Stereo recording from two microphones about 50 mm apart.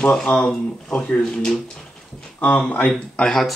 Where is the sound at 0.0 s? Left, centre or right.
Left.